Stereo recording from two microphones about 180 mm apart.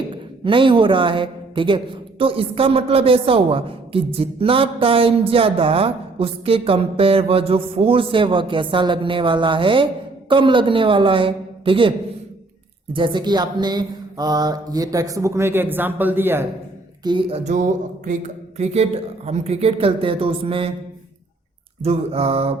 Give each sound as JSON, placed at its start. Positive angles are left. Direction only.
{"t": 0.1, "sound": "a man's voice", "side_deg": -30}
{"t": 17.0, "sound": "a woman's voice", "side_deg": -25}
{"t": 21.8, "sound": "a woman's voice", "side_deg": -35}